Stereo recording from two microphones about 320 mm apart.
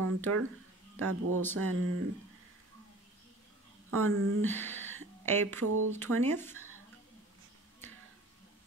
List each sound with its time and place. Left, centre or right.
0.0 s speech: right
3.9 s speech: right
4.5 s speech: centre
5.6 s speech: right
6.2 s speech: centre